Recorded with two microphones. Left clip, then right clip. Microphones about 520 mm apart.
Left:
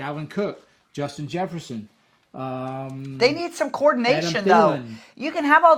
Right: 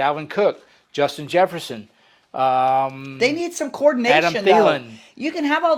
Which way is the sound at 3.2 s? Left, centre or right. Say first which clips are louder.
Even; left.